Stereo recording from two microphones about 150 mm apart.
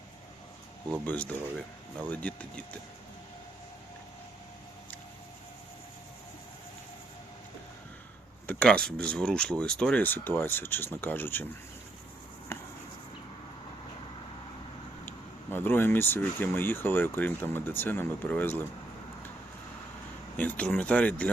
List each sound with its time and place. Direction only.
1.0 s speech: 10° left (ahead or behind)
8.4 s speech: 10° left (ahead or behind)
12.5 s a sound: 20° left (ahead or behind)
15.0 s speech: 15° left (ahead or behind)
20.3 s speech: 10° left (ahead or behind)